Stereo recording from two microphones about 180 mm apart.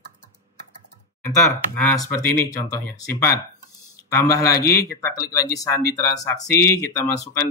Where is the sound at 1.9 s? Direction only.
20° left (ahead or behind).